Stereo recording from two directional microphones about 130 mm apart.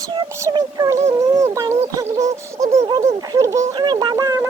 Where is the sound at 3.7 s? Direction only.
35° right (ahead or behind).